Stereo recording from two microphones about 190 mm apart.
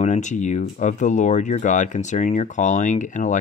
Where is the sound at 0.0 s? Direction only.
40° left (ahead or behind).